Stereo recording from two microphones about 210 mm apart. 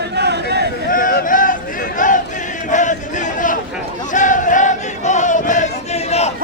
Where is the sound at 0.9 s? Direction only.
40° left (ahead or behind).